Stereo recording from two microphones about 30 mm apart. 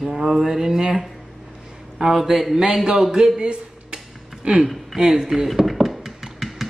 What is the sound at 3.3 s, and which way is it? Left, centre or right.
Dishes, right.